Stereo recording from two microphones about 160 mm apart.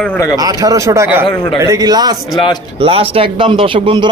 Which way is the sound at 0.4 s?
25° right (ahead or behind).